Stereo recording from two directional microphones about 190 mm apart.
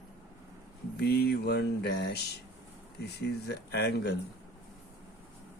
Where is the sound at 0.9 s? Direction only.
60° left (ahead or behind).